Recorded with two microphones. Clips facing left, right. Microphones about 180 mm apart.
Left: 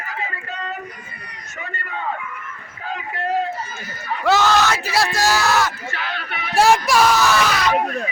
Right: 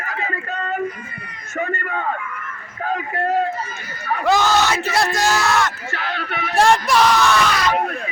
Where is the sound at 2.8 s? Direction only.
50° right (ahead or behind).